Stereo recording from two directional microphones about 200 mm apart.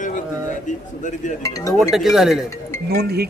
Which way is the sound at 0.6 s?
40° left (ahead or behind).